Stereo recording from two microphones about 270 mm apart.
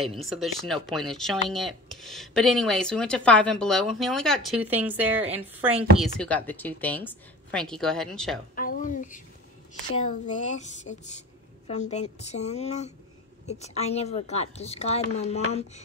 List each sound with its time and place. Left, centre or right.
0.0 s speech: centre
5.9 s speech: centre
8.5 s a woman's voice: left